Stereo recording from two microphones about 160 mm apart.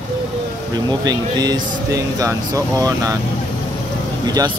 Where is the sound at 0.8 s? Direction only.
25° right (ahead or behind).